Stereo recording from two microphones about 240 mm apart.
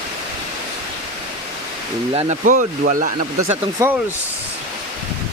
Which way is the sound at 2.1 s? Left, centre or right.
Right.